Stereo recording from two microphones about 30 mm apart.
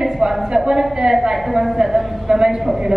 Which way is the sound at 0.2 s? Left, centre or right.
Right.